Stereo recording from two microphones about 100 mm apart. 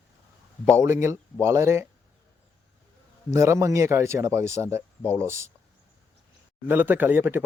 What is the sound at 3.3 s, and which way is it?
Speech, 30° right (ahead or behind).